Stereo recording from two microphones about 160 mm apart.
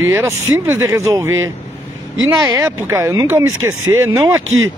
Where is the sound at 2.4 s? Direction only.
20° right (ahead or behind).